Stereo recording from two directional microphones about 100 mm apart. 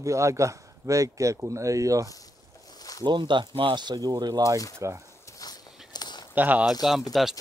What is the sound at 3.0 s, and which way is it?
Speech, 50° right (ahead or behind).